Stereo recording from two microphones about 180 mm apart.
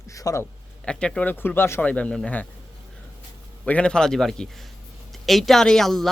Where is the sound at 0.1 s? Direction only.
20° left (ahead or behind).